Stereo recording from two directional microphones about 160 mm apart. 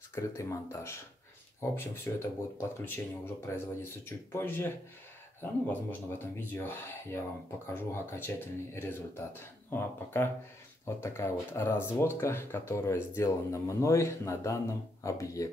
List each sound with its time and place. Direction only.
0.1 s speech: 20° left (ahead or behind)